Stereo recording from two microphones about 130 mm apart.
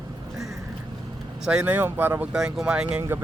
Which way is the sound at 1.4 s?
10° right (ahead or behind).